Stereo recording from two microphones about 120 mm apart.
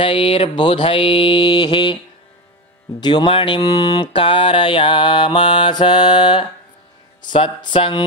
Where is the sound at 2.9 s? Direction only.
40° left (ahead or behind).